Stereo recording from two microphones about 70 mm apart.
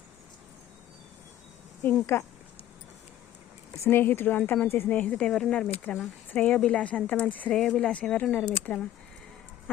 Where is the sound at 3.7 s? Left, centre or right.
Left.